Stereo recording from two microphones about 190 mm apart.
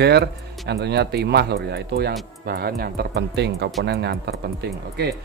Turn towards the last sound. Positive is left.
turn(degrees=-60)  # may be behind; listen again after turning